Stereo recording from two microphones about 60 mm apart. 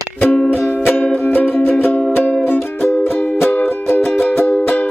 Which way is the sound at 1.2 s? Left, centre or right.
Left.